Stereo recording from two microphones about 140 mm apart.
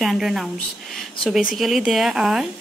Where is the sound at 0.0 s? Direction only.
5° right (ahead or behind).